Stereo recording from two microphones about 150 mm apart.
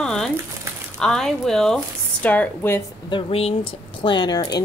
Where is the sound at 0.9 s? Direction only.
5° left (ahead or behind).